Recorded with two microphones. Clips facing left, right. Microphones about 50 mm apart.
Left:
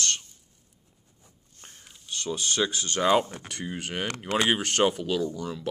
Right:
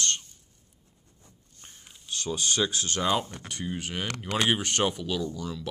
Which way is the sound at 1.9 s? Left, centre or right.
Centre.